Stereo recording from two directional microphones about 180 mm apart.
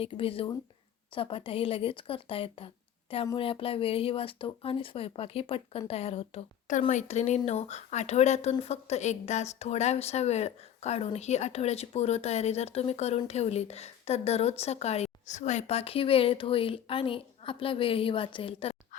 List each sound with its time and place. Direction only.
0.0 s a woman's voice: 30° left (ahead or behind)